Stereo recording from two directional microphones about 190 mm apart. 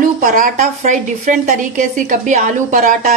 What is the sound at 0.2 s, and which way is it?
A woman's voice, 45° right (ahead or behind).